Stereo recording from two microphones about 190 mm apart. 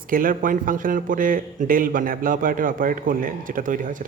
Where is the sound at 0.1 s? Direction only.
45° right (ahead or behind).